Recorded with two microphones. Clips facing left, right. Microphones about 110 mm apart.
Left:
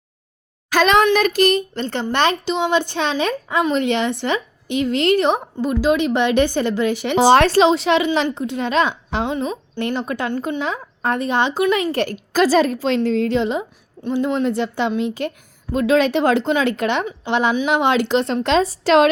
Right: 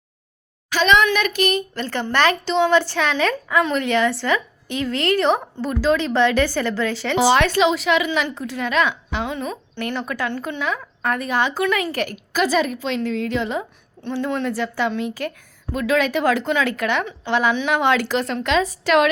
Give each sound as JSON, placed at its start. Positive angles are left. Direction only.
{"t": 0.7, "sound": "a woman's voice", "side_deg": 45}
{"t": 7.2, "sound": "a woman's voice", "side_deg": 40}